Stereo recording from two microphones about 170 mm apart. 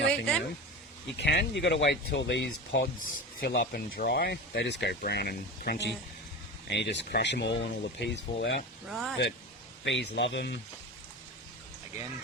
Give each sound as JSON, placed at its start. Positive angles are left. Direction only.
{"t": 0.1, "sound": "a sound", "side_deg": 0}
{"t": 1.2, "sound": "speech", "side_deg": 90}
{"t": 3.4, "sound": "speech", "side_deg": 75}
{"t": 6.7, "sound": "speech", "side_deg": 85}
{"t": 8.9, "sound": "speech", "side_deg": 0}
{"t": 9.8, "sound": "speech", "side_deg": 90}